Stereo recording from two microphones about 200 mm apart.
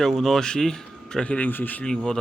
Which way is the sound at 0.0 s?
Centre (ahead or behind).